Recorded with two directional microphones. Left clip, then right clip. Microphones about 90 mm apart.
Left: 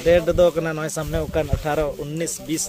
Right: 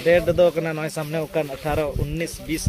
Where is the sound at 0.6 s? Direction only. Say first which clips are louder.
Left 1 dB; 35° left (ahead or behind).